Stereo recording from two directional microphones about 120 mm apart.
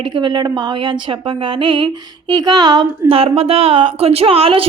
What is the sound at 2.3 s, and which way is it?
A woman's voice, 35° right (ahead or behind).